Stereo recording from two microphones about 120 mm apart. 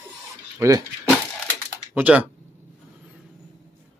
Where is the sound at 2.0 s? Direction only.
15° right (ahead or behind).